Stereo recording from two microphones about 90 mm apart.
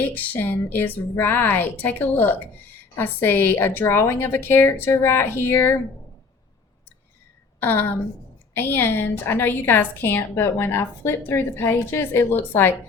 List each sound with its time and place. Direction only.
0.0 s a woman's voice: 20° left (ahead or behind)
7.6 s a woman's voice: 20° left (ahead or behind)